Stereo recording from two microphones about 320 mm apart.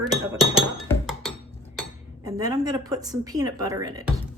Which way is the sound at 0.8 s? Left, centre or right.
Centre.